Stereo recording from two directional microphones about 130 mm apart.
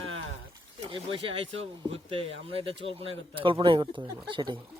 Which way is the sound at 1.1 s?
45° right (ahead or behind).